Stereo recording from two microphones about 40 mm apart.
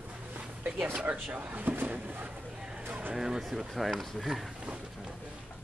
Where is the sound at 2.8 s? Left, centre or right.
Right.